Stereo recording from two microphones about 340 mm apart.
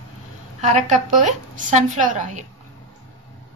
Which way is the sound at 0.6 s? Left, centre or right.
Right.